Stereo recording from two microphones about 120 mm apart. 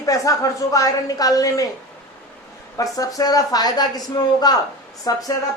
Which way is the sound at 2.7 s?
30° left (ahead or behind).